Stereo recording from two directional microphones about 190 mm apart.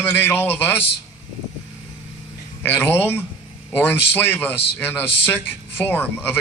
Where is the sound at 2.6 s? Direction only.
10° left (ahead or behind).